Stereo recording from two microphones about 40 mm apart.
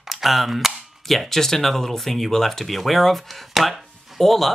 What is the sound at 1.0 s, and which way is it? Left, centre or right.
Speech, centre.